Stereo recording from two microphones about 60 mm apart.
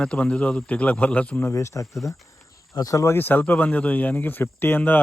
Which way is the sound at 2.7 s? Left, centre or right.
Left.